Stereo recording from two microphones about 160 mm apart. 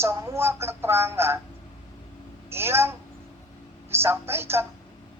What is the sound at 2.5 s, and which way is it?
Speech, 15° right (ahead or behind).